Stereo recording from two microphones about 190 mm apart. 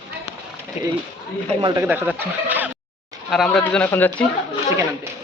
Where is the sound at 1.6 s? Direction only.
20° right (ahead or behind).